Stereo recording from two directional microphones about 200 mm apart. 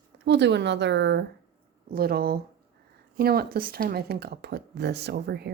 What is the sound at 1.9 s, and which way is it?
Speech, 50° right (ahead or behind).